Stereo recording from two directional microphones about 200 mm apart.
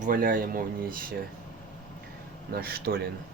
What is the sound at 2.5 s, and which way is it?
Speech, 50° right (ahead or behind).